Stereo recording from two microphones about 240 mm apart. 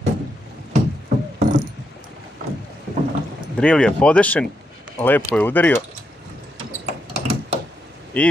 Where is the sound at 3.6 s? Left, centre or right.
Centre.